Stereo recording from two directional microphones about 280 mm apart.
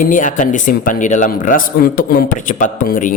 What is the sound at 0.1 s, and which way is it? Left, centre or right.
Speech, left.